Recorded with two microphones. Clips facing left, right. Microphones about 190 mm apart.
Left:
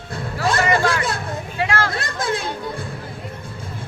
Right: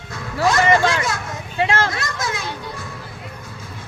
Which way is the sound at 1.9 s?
30° left (ahead or behind).